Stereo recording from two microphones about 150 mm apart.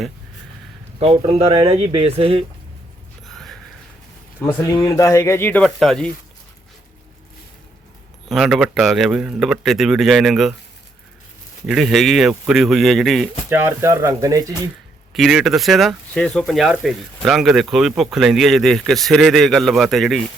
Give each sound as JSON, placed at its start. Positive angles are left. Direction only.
{"t": 0.9, "sound": "speech", "side_deg": -40}
{"t": 3.2, "sound": "a sound", "side_deg": 0}
{"t": 4.7, "sound": "speech", "side_deg": 25}
{"t": 5.6, "sound": "speech", "side_deg": 0}
{"t": 8.3, "sound": "speech", "side_deg": 0}
{"t": 11.6, "sound": "speech", "side_deg": 0}
{"t": 13.5, "sound": "speech", "side_deg": -15}
{"t": 15.1, "sound": "speech", "side_deg": 0}